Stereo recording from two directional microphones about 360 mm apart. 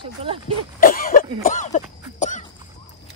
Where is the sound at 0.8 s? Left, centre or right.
Left.